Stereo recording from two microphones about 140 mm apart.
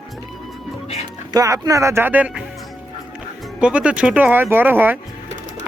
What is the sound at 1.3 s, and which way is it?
Speech, 25° right (ahead or behind).